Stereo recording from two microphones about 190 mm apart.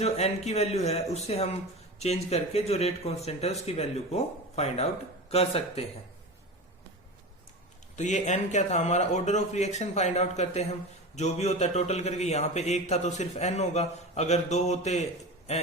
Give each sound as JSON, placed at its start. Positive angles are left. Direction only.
{"t": 0.0, "sound": "a man's voice", "side_deg": 35}
{"t": 7.9, "sound": "a man's voice", "side_deg": 40}